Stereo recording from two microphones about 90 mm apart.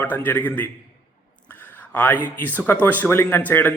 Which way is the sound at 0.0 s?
20° left (ahead or behind).